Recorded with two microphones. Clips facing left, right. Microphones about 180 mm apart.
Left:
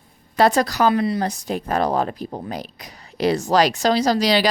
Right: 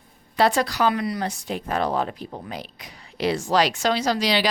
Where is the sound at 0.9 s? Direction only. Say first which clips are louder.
Left 6 dB; 25° left (ahead or behind).